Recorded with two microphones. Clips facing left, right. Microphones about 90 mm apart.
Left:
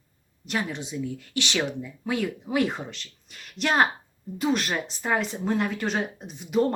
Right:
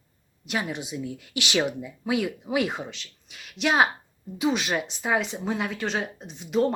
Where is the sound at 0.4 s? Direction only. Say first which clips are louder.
Even; 10° right (ahead or behind).